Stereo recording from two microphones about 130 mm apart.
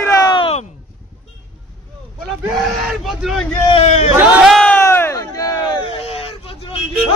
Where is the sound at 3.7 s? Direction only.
55° left (ahead or behind).